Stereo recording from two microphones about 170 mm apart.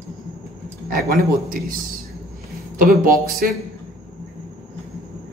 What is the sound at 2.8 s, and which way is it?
Speech, 55° right (ahead or behind).